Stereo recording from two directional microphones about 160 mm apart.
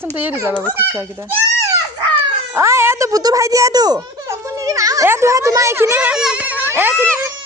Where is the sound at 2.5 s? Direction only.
15° right (ahead or behind).